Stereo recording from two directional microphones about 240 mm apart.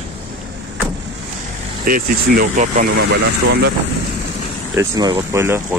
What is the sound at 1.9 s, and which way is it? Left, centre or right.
Speech, right.